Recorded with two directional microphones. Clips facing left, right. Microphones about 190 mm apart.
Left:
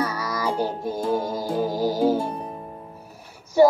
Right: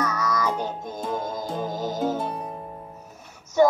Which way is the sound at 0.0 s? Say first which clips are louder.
Even; 30° left (ahead or behind).